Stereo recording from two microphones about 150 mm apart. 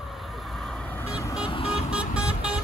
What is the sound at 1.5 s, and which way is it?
Vehicle, 35° left (ahead or behind).